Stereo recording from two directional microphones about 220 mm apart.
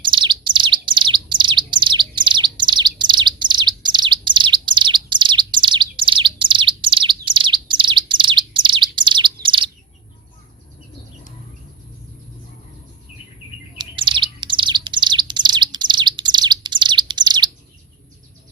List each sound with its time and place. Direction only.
0.0 s bird: 20° right (ahead or behind)
13.7 s bird: 20° right (ahead or behind)